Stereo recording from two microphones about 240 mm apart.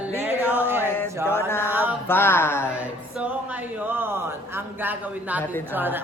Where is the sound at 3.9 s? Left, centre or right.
Centre.